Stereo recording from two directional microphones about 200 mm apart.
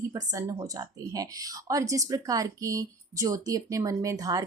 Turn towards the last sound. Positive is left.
turn(degrees=-20)  # may be behind; listen again after turning